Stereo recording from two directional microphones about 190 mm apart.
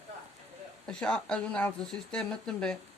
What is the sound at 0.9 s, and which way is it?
Speech, 5° left (ahead or behind).